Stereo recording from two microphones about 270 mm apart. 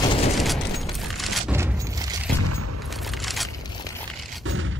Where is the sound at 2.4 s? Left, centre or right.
Right.